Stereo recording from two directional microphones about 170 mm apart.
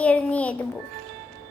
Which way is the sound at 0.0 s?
5° left (ahead or behind).